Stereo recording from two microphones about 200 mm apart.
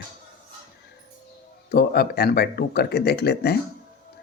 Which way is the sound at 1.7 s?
50° left (ahead or behind).